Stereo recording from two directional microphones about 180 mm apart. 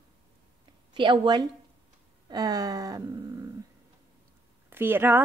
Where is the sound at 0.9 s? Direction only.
25° right (ahead or behind).